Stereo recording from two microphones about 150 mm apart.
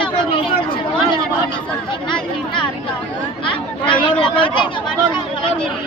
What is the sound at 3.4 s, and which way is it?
Chatter, 35° left (ahead or behind).